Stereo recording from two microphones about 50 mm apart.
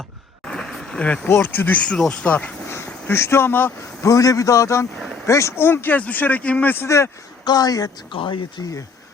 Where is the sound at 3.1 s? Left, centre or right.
Left.